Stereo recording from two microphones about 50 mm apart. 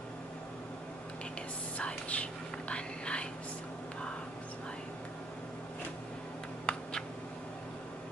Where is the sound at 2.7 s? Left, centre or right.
Left.